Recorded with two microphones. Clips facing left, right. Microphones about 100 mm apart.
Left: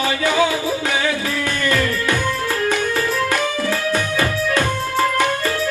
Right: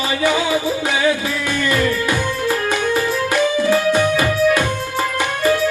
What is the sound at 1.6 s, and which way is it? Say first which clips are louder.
Music: right 1 dB; 20° right (ahead or behind).